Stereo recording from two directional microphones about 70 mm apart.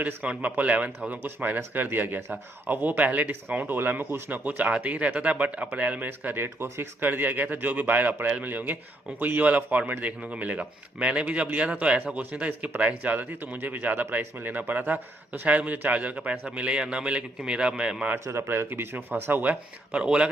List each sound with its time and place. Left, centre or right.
0.0 s a man's voice: centre
6.1 s a man's voice: right; by 18.1 s centre
18.3 s speech: right; by 20.2 s centre